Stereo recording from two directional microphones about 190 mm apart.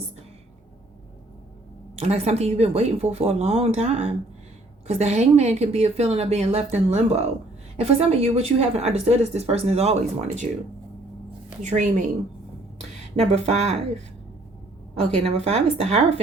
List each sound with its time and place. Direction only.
2.0 s a woman's voice: 35° right (ahead or behind)
11.6 s a woman's voice: 40° right (ahead or behind)
13.1 s a woman's voice: 35° right (ahead or behind)
15.2 s a woman's voice: 35° right (ahead or behind)